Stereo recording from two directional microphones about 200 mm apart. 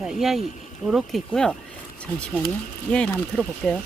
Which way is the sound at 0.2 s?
Centre (ahead or behind).